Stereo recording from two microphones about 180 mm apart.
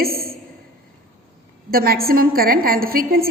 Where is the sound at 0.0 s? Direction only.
55° right (ahead or behind).